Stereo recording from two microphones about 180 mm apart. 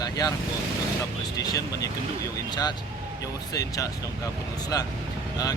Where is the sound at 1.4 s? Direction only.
20° left (ahead or behind).